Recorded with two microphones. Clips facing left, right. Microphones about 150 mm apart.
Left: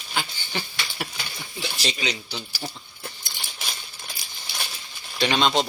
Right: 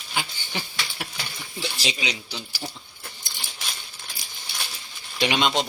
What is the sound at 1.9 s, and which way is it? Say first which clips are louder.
Speech: left 3 dB; 10° right (ahead or behind).